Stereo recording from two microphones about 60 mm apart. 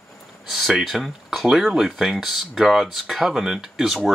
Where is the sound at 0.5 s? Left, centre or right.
Centre.